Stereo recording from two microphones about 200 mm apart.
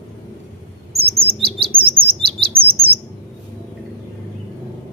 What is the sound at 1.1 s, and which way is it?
Chirp, 30° right (ahead or behind).